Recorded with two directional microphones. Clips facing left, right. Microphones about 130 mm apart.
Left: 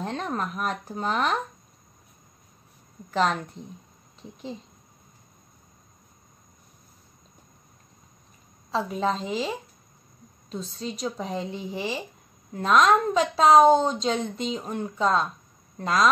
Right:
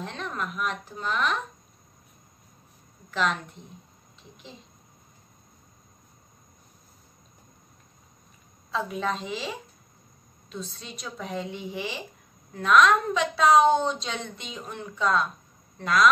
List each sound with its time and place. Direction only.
0.0 s a sound: 40° left (ahead or behind)
0.9 s a woman's voice: 40° left (ahead or behind)
3.1 s a woman's voice: 40° left (ahead or behind)
8.7 s a woman's voice: 30° left (ahead or behind)
10.5 s a woman's voice: 40° left (ahead or behind)